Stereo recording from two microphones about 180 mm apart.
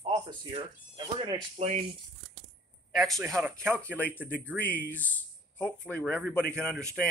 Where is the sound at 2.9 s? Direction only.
Centre (ahead or behind).